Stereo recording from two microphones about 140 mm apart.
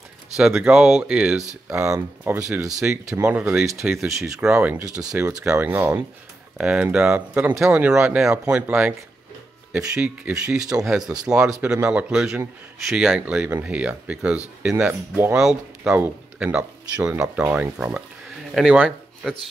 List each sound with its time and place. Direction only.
0.6 s speech: 5° right (ahead or behind)
2.2 s speech: 20° right (ahead or behind); by 19.4 s centre (ahead or behind)